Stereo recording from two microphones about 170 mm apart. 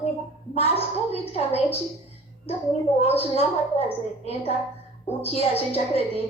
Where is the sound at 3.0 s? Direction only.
35° left (ahead or behind).